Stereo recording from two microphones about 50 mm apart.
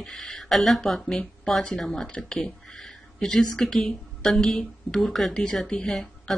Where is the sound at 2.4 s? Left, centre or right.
Centre.